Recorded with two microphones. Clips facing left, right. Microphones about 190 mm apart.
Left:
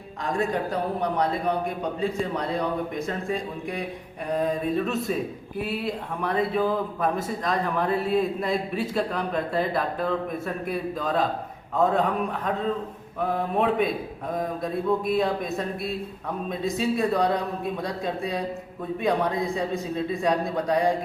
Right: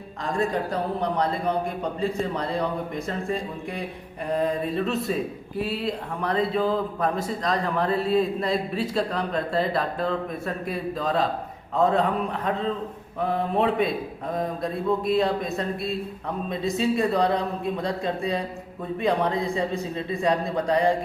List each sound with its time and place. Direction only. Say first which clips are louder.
0.3 s a man's voice: right 1 dB; centre (ahead or behind)
13.6 s a man's voice: even; centre (ahead or behind)